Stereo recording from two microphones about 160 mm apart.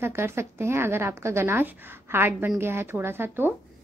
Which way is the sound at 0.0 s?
15° right (ahead or behind).